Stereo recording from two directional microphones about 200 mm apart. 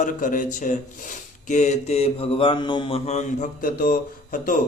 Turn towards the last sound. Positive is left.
turn(degrees=45)  # may be behind; listen again after turning